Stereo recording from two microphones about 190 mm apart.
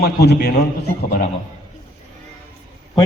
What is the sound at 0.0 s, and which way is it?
Speech, 60° left (ahead or behind).